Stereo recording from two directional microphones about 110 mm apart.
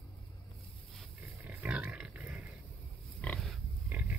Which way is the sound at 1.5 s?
15° right (ahead or behind).